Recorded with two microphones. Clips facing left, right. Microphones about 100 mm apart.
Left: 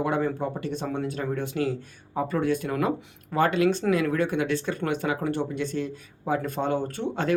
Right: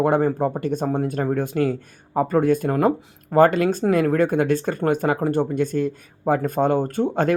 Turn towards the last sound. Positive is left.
turn(degrees=-45)  # may be behind; listen again after turning